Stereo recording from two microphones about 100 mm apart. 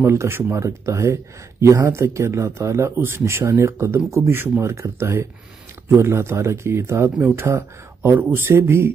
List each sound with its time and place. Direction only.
0.0 s speech: 25° right (ahead or behind)